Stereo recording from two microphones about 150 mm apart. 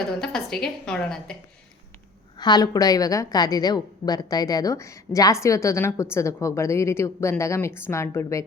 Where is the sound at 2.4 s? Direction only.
30° left (ahead or behind).